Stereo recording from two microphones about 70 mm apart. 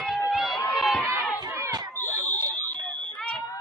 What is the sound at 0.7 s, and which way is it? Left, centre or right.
Run, centre.